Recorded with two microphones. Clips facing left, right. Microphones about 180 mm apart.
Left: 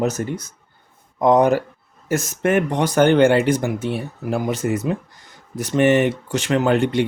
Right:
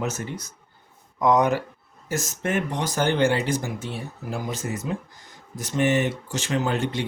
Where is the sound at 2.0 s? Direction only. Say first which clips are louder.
Left 7 dB; 65° left (ahead or behind).